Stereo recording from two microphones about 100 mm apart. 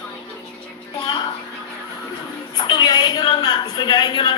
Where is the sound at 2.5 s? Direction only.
45° left (ahead or behind).